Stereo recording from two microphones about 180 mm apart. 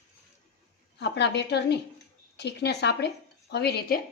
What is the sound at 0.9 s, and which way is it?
A woman's voice, 70° left (ahead or behind).